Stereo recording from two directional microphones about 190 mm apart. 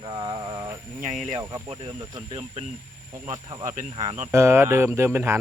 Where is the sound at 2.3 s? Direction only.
35° right (ahead or behind).